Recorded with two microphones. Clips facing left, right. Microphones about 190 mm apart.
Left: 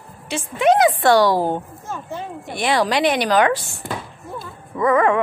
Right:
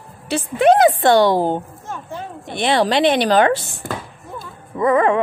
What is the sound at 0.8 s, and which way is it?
A woman's voice, 25° right (ahead or behind).